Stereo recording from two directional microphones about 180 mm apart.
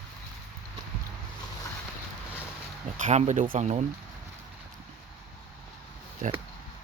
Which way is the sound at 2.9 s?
40° right (ahead or behind).